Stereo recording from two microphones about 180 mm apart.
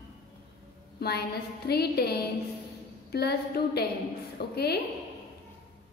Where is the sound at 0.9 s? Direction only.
65° left (ahead or behind).